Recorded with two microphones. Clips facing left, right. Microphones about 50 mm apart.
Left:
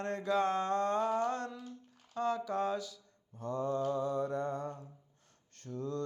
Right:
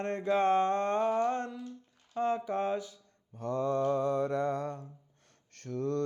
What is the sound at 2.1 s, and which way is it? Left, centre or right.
Mantra, right.